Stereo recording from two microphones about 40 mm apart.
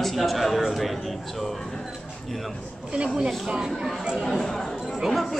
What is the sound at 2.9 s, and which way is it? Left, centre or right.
Speech, right.